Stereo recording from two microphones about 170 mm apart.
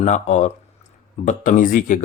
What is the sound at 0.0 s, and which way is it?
Speech, 45° left (ahead or behind).